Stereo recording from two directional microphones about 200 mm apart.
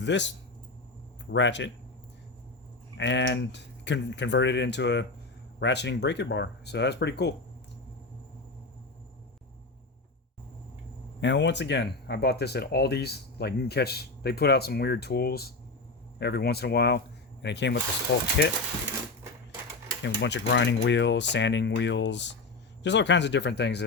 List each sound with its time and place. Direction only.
0.0 s speech: 60° left (ahead or behind)
1.3 s speech: 65° left (ahead or behind)
3.0 s speech: 65° left (ahead or behind)
11.2 s speech: 60° left (ahead or behind)
20.0 s speech: 60° left (ahead or behind)